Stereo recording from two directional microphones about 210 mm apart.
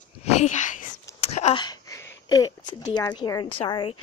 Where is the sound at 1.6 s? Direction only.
15° left (ahead or behind).